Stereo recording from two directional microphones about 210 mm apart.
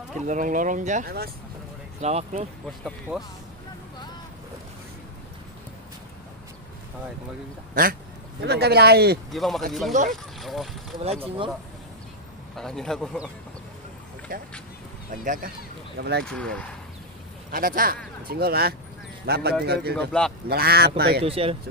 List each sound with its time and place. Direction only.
0.3 s speech: 40° right (ahead or behind)
2.0 s speech: 35° right (ahead or behind)
2.6 s a man's voice: centre (ahead or behind)
8.4 s speech: 50° right (ahead or behind)
9.3 s a man's voice: centre (ahead or behind)
11.1 s speech: 25° right (ahead or behind)
12.5 s a man's voice: centre (ahead or behind)
14.3 s speech: 40° right (ahead or behind)
16.0 s speech: 50° right (ahead or behind)
16.3 s a man's voice: 5° left (ahead or behind)
17.5 s speech: 40° right (ahead or behind)
20.0 s a man's voice: 5° left (ahead or behind)
20.4 s speech: 45° right (ahead or behind)
21.2 s speech: 25° right (ahead or behind)